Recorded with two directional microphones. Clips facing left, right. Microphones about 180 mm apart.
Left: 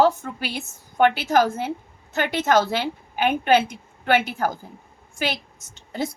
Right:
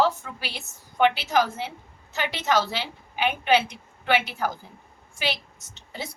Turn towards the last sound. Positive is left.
turn(degrees=50)  # may be behind; listen again after turning